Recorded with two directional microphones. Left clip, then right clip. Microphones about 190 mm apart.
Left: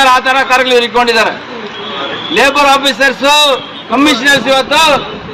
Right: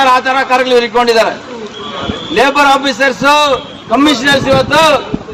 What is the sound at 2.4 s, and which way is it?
A man's voice, centre (ahead or behind).